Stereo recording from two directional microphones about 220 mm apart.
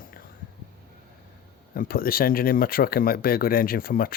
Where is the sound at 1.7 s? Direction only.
40° left (ahead or behind).